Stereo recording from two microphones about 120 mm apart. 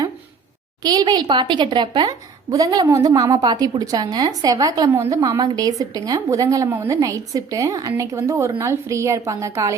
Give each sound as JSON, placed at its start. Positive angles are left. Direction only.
{"t": 0.8, "sound": "a woman's voice", "side_deg": -30}